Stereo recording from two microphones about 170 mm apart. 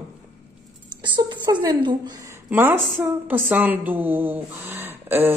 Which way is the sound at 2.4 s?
15° right (ahead or behind).